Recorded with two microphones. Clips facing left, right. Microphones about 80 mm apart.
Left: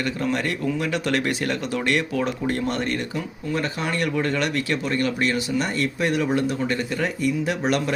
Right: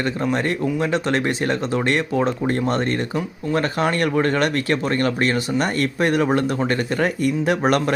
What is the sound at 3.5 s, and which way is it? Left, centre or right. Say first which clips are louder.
Speech: right 5 dB; right.